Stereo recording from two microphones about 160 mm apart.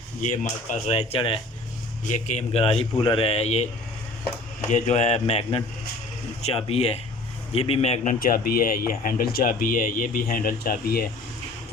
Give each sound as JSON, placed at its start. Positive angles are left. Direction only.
{"t": 0.7, "sound": "speech", "side_deg": 40}
{"t": 2.0, "sound": "a man's voice", "side_deg": 45}
{"t": 4.7, "sound": "speech", "side_deg": 45}
{"t": 8.2, "sound": "speech", "side_deg": 65}